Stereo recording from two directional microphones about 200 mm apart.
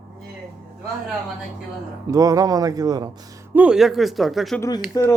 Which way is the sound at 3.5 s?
5° right (ahead or behind).